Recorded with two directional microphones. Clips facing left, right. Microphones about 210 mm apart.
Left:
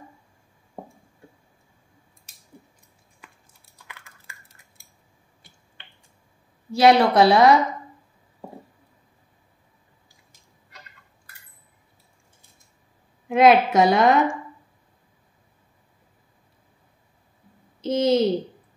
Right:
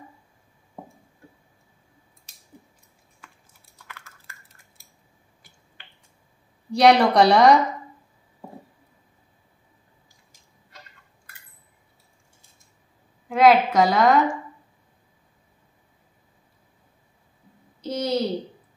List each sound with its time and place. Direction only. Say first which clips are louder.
3.7 s computer keyboard: right 1 dB; 15° left (ahead or behind)
6.7 s a woman's voice: even; centre (ahead or behind)
13.3 s a woman's voice: left 1 dB; 25° left (ahead or behind)
17.8 s a sound: left 6 dB; 25° left (ahead or behind)